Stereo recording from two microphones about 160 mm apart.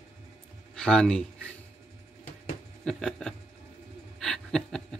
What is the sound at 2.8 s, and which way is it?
Speech, 5° left (ahead or behind).